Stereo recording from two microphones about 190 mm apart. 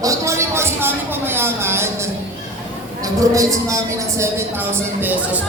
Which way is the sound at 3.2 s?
15° right (ahead or behind).